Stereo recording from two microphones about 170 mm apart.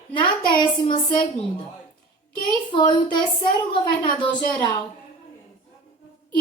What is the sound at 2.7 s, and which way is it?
Speech, 25° left (ahead or behind).